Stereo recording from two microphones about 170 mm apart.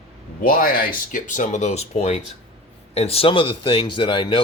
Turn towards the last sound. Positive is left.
turn(degrees=30)  # may be behind; listen again after turning